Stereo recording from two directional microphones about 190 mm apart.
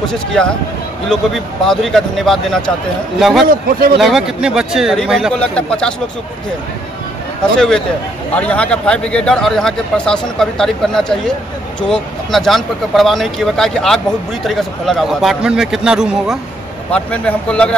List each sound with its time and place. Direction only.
0.1 s speech: 5° left (ahead or behind)
7.5 s speech: 5° left (ahead or behind)
16.9 s a man's voice: 5° left (ahead or behind)